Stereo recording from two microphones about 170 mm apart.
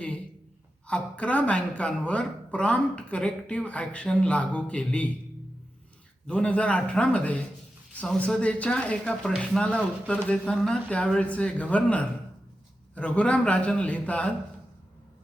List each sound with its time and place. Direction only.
0.9 s speech: 5° left (ahead or behind)
6.2 s speech: 5° left (ahead or behind)